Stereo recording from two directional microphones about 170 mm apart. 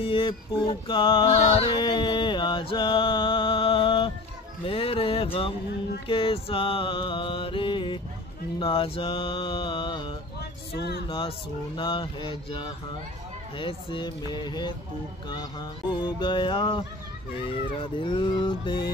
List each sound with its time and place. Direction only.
0.0 s music: 30° left (ahead or behind)
4.6 s mantra: 35° left (ahead or behind)
10.8 s speech: 70° left (ahead or behind)
11.1 s mantra: 30° left (ahead or behind)
13.6 s music: 30° left (ahead or behind)
15.9 s music: 25° left (ahead or behind)